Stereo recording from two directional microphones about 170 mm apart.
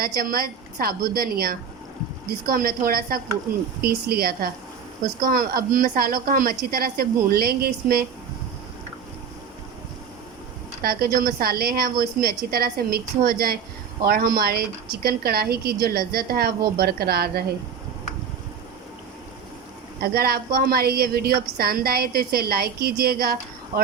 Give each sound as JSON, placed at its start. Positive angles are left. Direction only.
{"t": 0.0, "sound": "a woman's voice", "side_deg": -60}
{"t": 10.8, "sound": "a woman's voice", "side_deg": -60}
{"t": 20.0, "sound": "a woman's voice", "side_deg": -65}